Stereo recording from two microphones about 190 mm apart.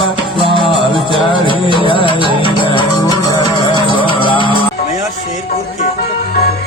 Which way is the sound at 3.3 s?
25° left (ahead or behind).